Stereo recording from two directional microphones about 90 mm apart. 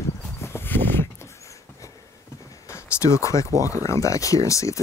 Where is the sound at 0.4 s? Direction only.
25° left (ahead or behind).